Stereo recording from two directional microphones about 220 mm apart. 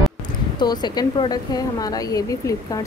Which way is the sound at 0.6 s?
20° left (ahead or behind).